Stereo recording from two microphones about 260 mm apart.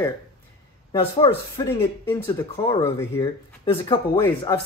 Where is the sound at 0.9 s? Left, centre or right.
Left.